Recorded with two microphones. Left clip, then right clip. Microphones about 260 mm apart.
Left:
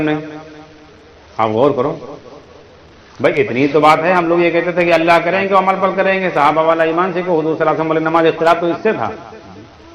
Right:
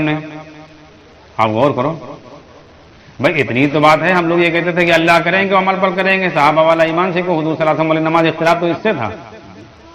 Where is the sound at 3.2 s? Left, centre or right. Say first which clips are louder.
Even; right.